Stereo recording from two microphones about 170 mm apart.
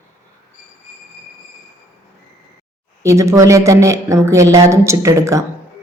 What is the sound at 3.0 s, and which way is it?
Speech, 15° right (ahead or behind).